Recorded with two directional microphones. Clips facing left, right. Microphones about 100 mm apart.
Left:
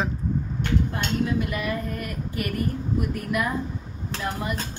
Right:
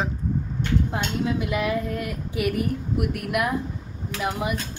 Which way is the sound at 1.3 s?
90° right.